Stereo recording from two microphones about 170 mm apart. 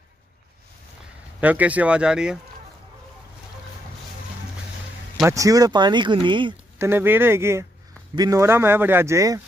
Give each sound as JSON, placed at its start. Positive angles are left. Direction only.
{"t": 1.4, "sound": "speech", "side_deg": -10}
{"t": 5.2, "sound": "speech", "side_deg": -20}
{"t": 6.8, "sound": "speech", "side_deg": -10}